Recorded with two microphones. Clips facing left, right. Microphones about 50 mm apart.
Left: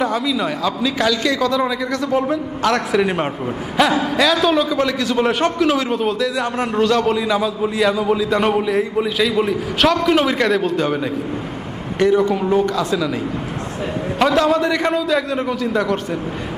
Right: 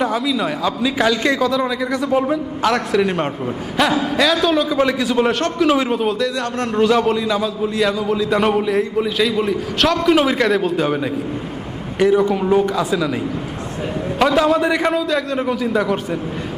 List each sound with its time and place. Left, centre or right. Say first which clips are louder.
0.0 s a man's voice: even; centre
1.1 s a man's voice: right 1 dB; right
1.4 s a man's voice: even; centre
4.8 s a man's voice: right 1 dB; centre
14.2 s a man's voice: even; centre
14.6 s a man's voice: right 1 dB; centre
14.8 s a man's voice: even; centre